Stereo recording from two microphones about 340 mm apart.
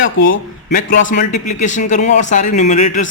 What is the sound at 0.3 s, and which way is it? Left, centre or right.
Speech, left.